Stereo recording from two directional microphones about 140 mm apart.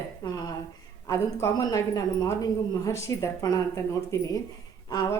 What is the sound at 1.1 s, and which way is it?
Speech, 25° left (ahead or behind).